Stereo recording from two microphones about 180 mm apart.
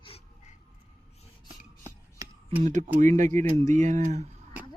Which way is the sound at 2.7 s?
40° right (ahead or behind).